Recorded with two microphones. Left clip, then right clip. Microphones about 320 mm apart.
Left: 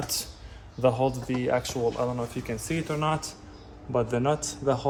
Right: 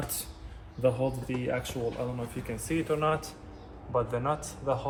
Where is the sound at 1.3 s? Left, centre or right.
Left.